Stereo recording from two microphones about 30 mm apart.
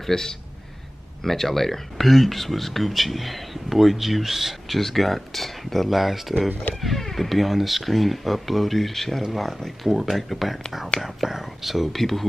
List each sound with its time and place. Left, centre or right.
0.0 s speech: centre
4.7 s speech: centre
5.9 s speech: centre
9.7 s speech: centre
11.9 s speech: centre